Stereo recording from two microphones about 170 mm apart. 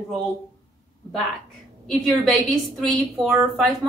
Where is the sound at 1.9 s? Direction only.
Centre (ahead or behind).